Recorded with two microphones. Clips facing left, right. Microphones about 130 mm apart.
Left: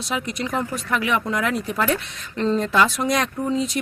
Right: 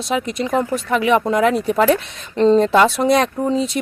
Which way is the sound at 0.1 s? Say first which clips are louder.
Right 6 dB; 25° right (ahead or behind).